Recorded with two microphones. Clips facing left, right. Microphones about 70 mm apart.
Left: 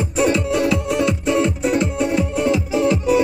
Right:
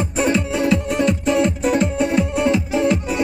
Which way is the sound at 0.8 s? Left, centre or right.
Right.